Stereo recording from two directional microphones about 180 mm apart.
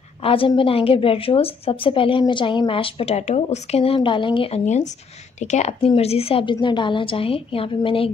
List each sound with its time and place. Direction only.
0.2 s a woman's voice: 30° left (ahead or behind)